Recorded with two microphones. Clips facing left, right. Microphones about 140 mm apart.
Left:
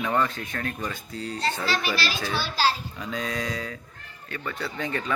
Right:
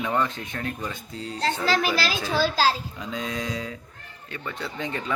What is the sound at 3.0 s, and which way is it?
Speech, 20° right (ahead or behind).